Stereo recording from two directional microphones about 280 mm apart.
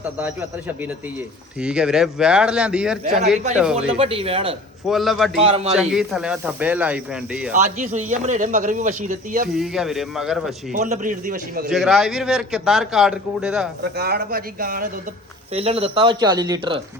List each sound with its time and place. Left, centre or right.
1.6 s a man's voice: centre
3.8 s speech: centre
4.9 s a man's voice: centre
5.3 s speech: right
5.7 s a man's voice: centre
7.5 s speech: right
9.5 s a man's voice: centre
10.7 s speech: right
11.7 s a man's voice: centre
13.8 s speech: right; by 16.8 s centre